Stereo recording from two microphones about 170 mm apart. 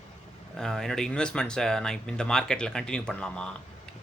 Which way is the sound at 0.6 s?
5° left (ahead or behind).